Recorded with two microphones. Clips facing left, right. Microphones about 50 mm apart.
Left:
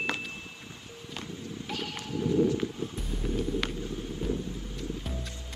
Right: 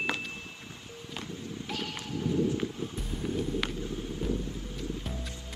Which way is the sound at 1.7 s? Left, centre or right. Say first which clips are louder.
Left 1 dB; centre.